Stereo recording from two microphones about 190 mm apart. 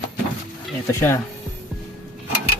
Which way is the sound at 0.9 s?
15° left (ahead or behind).